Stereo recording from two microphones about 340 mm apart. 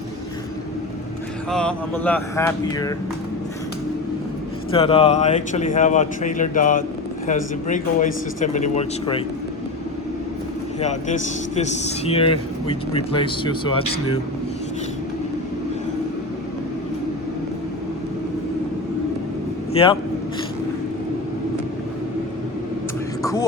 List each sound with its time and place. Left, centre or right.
1.5 s speech: centre
4.7 s speech: centre
10.8 s speech: centre
19.7 s speech: centre
23.2 s music: centre